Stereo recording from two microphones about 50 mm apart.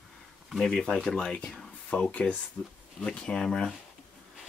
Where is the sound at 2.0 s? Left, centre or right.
Left.